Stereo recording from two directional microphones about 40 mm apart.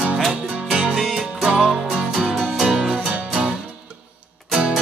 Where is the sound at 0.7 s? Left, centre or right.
Centre.